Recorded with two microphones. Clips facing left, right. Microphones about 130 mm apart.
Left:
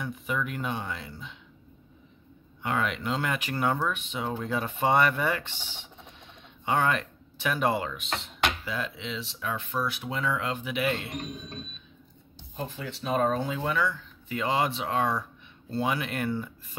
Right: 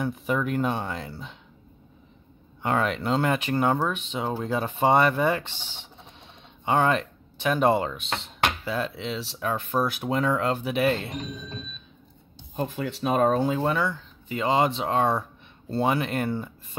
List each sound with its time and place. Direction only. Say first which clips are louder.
0.0 s speech: right 5 dB; 40° right (ahead or behind)
2.6 s speech: right 4 dB; 40° right (ahead or behind)
12.5 s speech: right 7 dB; 55° right (ahead or behind); by 16.4 s 30° right (ahead or behind)